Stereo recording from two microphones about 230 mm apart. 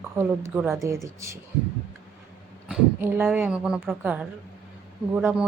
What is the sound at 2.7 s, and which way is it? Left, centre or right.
Speech, centre.